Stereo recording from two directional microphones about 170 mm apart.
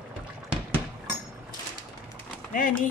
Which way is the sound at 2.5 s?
50° left (ahead or behind).